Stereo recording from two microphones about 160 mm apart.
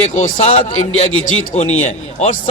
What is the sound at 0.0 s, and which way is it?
Speech, 50° left (ahead or behind).